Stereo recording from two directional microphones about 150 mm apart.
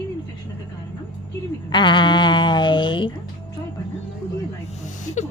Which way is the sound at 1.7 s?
30° left (ahead or behind).